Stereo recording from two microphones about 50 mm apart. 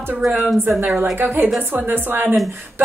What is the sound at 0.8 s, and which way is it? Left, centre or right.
A woman's voice, right.